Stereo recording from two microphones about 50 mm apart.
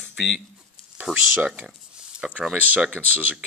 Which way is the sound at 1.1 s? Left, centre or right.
Centre.